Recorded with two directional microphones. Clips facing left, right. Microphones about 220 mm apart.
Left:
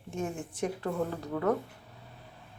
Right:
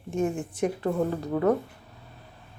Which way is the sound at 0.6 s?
15° right (ahead or behind).